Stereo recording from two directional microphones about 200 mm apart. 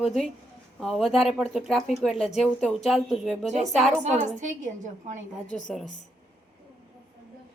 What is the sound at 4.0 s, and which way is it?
Speech, 35° right (ahead or behind).